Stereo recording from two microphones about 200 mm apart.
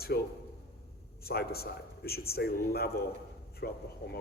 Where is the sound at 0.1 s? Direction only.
50° left (ahead or behind).